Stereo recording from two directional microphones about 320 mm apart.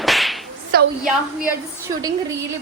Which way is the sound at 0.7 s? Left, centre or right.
Right.